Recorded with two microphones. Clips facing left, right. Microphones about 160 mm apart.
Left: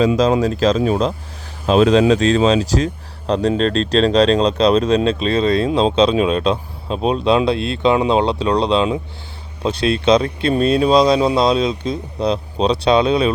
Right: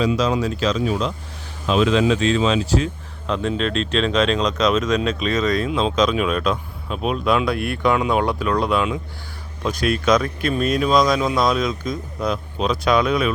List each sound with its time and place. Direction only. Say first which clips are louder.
0.0 s speech: left 5 dB; 45° left (ahead or behind); by 13.3 s 30° left (ahead or behind)